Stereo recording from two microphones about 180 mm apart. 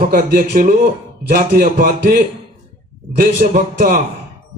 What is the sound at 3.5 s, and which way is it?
Speech, 45° right (ahead or behind).